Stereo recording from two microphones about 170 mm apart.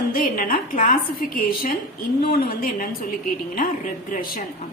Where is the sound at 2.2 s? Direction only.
60° left (ahead or behind).